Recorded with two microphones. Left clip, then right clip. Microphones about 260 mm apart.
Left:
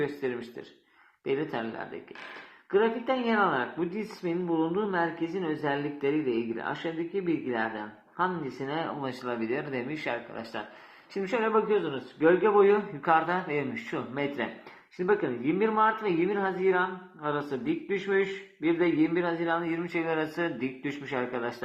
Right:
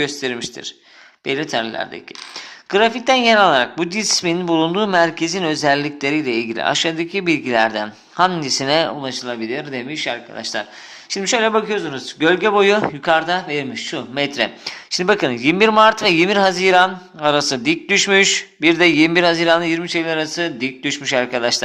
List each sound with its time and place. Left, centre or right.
0.0 s speech: right